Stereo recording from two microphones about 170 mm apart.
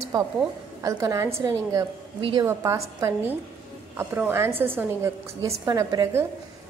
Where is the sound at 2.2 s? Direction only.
30° right (ahead or behind).